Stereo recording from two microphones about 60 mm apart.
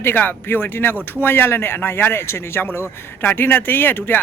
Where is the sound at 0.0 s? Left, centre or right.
Left.